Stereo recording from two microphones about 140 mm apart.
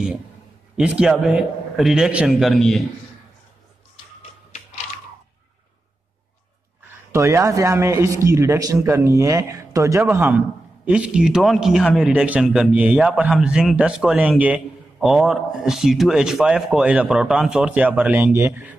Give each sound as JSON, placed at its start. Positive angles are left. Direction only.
{"t": 0.7, "sound": "speech", "side_deg": -5}
{"t": 7.1, "sound": "speech", "side_deg": -20}